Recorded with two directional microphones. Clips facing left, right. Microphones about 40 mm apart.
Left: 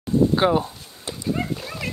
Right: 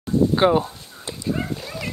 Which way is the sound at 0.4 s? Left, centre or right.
Centre.